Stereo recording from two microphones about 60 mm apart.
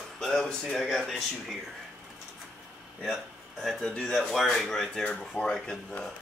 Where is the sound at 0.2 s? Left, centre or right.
Centre.